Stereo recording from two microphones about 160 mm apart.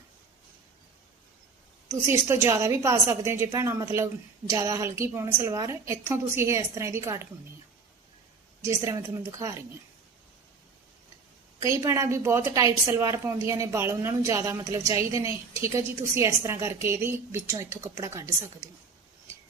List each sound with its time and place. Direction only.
1.9 s a woman's voice: 15° right (ahead or behind)
8.6 s a woman's voice: 20° right (ahead or behind)
11.6 s a woman's voice: 20° right (ahead or behind)